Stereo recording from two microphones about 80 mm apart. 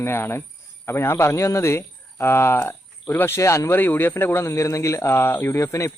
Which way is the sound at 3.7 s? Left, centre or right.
Left.